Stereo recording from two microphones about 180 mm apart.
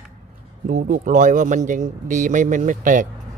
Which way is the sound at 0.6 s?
45° right (ahead or behind).